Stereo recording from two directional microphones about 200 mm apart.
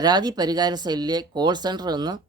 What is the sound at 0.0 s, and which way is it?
Speech, 20° right (ahead or behind).